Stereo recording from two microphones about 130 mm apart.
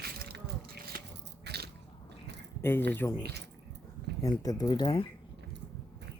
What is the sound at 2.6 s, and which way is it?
Speech, 15° left (ahead or behind).